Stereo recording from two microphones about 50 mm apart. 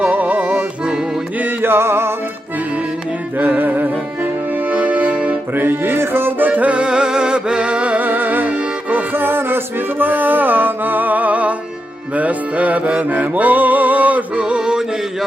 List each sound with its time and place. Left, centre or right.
0.0 s music: right
1.4 s music: right
3.3 s music: right
5.5 s music: right
6.5 s music: right
9.1 s music: right
14.6 s music: centre